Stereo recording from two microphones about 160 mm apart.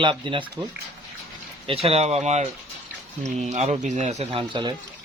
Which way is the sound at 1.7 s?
35° right (ahead or behind).